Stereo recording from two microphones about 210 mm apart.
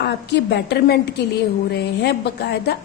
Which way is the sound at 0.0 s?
55° left (ahead or behind).